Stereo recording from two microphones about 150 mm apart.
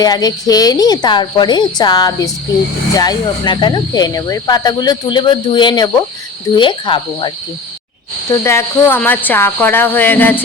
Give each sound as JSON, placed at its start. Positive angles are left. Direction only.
{"t": 0.0, "sound": "speech", "side_deg": 25}
{"t": 8.3, "sound": "speech", "side_deg": 20}